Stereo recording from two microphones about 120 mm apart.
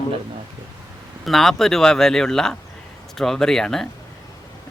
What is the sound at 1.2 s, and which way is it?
Speech, centre (ahead or behind).